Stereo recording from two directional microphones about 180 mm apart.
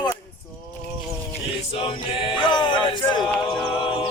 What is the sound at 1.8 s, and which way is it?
Music, 30° left (ahead or behind).